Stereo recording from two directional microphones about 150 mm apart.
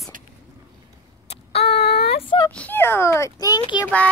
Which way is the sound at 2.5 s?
10° left (ahead or behind).